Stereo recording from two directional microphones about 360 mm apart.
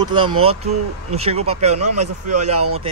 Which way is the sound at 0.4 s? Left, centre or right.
Centre.